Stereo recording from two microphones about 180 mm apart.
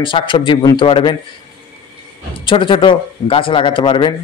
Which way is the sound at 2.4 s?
30° left (ahead or behind).